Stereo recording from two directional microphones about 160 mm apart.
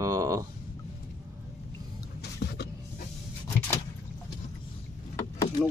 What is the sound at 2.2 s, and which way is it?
Power windows, 90° left.